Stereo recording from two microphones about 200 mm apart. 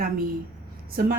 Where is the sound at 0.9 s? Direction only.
50° right (ahead or behind).